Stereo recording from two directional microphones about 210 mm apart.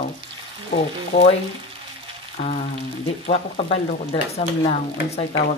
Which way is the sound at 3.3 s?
30° left (ahead or behind).